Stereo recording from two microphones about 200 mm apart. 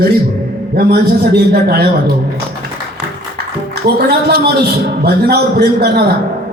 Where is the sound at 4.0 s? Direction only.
50° right (ahead or behind).